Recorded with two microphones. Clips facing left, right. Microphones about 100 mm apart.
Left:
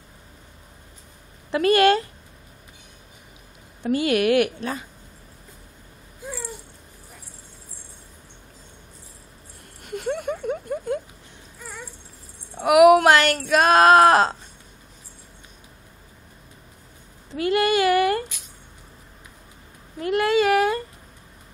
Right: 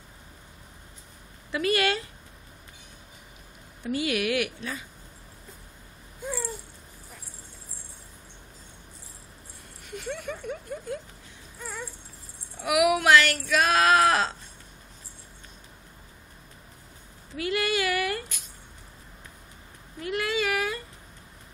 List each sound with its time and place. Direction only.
1.5 s speech: 50° left (ahead or behind)
3.8 s speech: 50° left (ahead or behind)
9.8 s a sound: 50° left (ahead or behind)
12.5 s speech: 50° left (ahead or behind)
17.4 s speech: 45° left (ahead or behind)
20.0 s speech: 45° left (ahead or behind)